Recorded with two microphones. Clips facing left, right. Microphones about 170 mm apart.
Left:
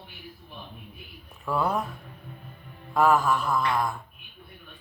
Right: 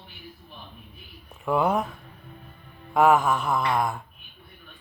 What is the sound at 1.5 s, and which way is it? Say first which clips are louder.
Mantra: right 4 dB; 20° right (ahead or behind).